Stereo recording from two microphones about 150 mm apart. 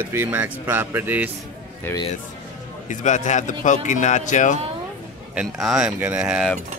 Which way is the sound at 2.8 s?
55° left (ahead or behind).